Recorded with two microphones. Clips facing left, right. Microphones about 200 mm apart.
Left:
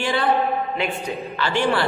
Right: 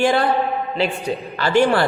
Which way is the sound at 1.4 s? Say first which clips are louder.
Right 5 dB; 45° right (ahead or behind).